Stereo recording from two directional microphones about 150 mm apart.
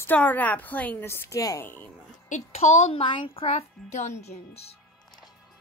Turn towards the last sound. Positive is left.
turn(degrees=50)  # may be behind; listen again after turning